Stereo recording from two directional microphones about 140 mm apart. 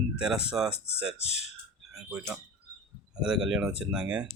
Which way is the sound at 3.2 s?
5° right (ahead or behind).